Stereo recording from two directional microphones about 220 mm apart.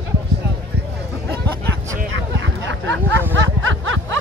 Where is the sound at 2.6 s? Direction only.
55° right (ahead or behind).